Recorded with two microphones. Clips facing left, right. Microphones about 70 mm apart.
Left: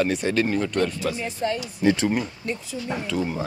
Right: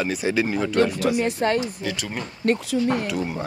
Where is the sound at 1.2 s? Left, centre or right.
Right.